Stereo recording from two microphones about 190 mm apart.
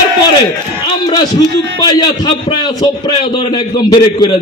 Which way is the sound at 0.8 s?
20° left (ahead or behind).